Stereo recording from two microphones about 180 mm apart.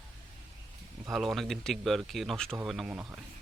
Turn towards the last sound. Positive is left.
turn(degrees=-5)  # may be behind; listen again after turning